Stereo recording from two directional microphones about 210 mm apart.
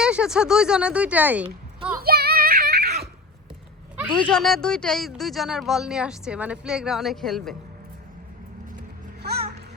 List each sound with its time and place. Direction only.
0.0 s speech: 5° right (ahead or behind)
2.0 s child singing: 50° right (ahead or behind)
4.1 s speech: 5° left (ahead or behind)
9.2 s a sound: 50° right (ahead or behind)